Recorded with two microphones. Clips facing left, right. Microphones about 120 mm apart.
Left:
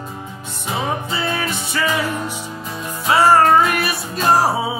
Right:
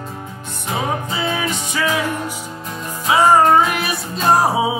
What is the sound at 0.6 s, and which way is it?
Music, centre (ahead or behind).